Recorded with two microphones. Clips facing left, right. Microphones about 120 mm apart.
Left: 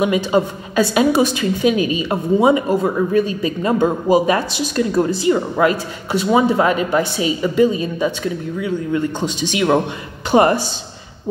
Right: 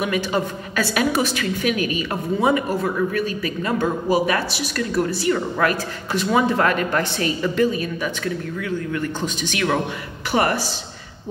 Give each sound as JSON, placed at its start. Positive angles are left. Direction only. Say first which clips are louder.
{"t": 0.0, "sound": "a woman's voice", "louder": "left 6 dB", "side_deg": 20}